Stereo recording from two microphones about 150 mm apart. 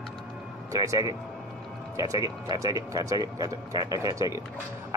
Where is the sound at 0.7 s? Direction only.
25° right (ahead or behind).